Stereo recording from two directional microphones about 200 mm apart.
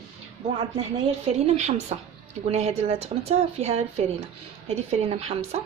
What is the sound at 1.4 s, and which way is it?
Speech, 35° right (ahead or behind).